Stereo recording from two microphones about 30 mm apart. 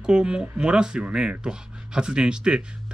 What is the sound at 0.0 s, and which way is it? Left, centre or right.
Speech, right.